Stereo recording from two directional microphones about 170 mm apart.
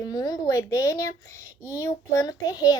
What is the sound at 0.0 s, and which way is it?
A woman's voice, 25° left (ahead or behind).